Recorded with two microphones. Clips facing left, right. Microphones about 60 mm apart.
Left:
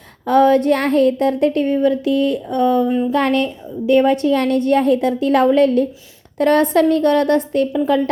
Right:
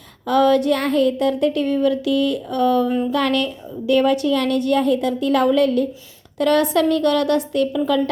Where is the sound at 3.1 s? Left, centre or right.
Left.